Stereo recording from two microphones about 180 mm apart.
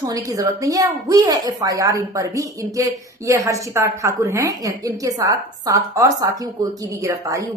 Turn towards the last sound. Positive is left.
turn(degrees=-15)  # may be behind; listen again after turning